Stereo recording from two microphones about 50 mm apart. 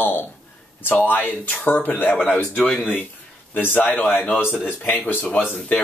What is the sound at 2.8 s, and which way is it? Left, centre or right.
Speech, left.